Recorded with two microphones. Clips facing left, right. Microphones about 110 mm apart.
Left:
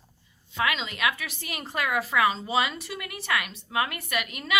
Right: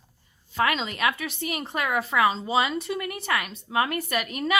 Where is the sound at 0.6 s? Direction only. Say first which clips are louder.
Right 3 dB; 35° right (ahead or behind).